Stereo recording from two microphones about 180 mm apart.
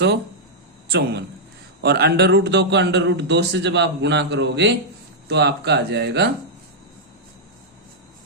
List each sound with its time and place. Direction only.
0.9 s a man's voice: 65° right (ahead or behind)